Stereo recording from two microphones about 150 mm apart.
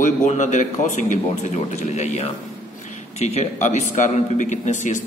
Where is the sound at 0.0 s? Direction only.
55° left (ahead or behind).